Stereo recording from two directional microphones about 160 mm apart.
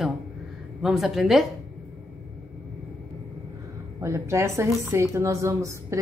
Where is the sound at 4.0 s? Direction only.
15° right (ahead or behind).